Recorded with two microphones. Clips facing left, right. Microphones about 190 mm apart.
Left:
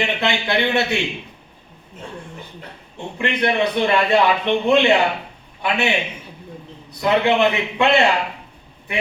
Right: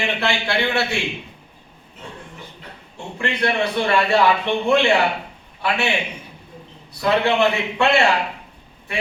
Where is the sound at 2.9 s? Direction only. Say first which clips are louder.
Left 2 dB; 20° left (ahead or behind).